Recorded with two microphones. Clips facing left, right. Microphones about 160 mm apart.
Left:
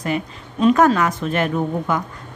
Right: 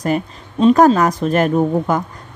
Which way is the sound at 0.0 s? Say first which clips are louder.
Right 4 dB; 35° right (ahead or behind).